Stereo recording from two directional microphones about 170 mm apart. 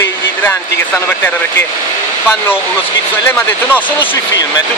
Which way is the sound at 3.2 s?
10° left (ahead or behind).